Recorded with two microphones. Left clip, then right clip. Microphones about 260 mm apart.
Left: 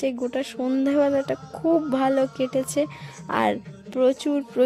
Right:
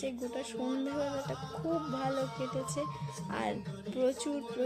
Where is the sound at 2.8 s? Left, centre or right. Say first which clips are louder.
Left 12 dB; left.